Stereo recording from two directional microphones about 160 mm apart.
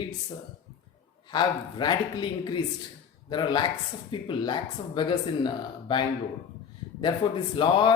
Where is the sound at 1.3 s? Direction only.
30° left (ahead or behind).